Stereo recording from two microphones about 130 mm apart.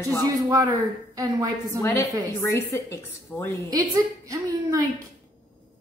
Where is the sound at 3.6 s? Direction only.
30° right (ahead or behind).